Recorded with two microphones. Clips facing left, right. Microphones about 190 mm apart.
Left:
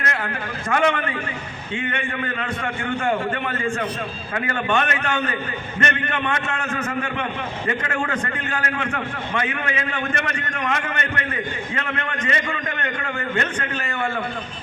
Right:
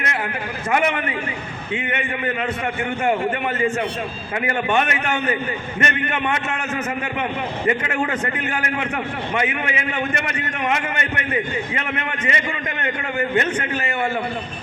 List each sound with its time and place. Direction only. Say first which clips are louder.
0.7 s a man's voice: even; 20° right (ahead or behind)
4.4 s a man's voice: right 2 dB; 20° right (ahead or behind)